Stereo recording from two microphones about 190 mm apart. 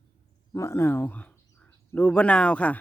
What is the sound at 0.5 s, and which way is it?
Speech, 15° left (ahead or behind).